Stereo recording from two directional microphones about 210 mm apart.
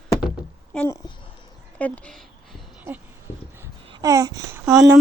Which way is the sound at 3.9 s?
15° right (ahead or behind).